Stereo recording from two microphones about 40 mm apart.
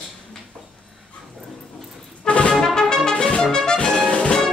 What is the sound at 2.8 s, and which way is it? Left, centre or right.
Trumpet, centre.